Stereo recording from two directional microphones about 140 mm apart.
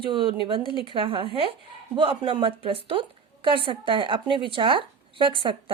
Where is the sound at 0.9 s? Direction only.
40° right (ahead or behind).